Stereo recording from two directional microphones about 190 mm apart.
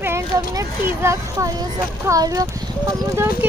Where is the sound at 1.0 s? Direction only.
15° right (ahead or behind).